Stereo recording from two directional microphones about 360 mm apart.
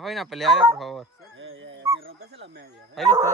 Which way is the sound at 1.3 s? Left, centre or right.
Right.